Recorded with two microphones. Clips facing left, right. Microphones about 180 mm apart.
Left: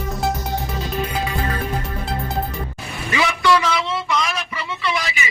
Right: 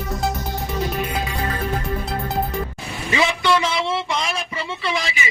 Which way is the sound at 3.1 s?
25° right (ahead or behind).